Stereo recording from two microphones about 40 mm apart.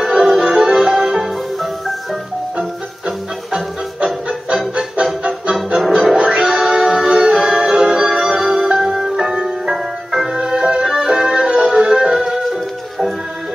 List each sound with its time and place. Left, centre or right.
0.0 s music: centre
1.1 s music: centre
3.5 s music: centre
5.2 s music: right
5.8 s music: centre
6.1 s music: centre